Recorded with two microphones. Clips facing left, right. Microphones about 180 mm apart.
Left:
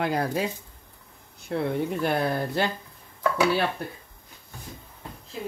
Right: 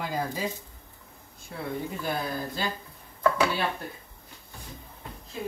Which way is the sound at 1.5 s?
70° left (ahead or behind).